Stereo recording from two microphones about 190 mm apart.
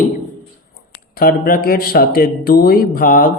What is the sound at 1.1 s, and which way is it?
Speech, 50° left (ahead or behind).